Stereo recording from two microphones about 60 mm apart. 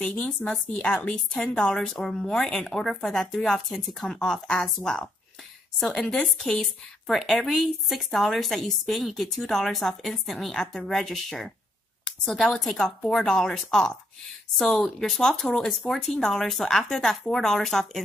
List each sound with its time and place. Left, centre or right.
0.0 s speech: centre
0.8 s a woman's voice: left
1.5 s speech: centre